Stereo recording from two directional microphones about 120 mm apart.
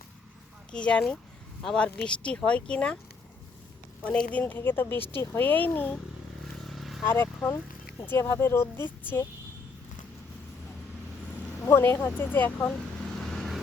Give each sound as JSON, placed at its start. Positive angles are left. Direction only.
{"t": 0.7, "sound": "a woman's voice", "side_deg": 10}
{"t": 4.0, "sound": "a woman's voice", "side_deg": 10}
{"t": 6.7, "sound": "vehicle", "side_deg": 0}
{"t": 7.0, "sound": "speech", "side_deg": 20}
{"t": 11.6, "sound": "a woman's voice", "side_deg": 20}
{"t": 13.1, "sound": "vehicle", "side_deg": 0}